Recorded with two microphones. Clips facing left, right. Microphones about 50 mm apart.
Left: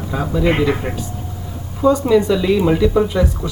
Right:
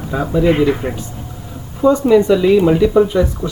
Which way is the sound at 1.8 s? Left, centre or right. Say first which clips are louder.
Right 2 dB; right.